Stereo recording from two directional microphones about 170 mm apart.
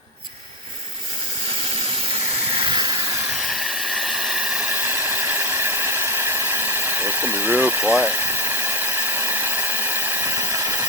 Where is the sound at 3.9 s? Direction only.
Centre (ahead or behind).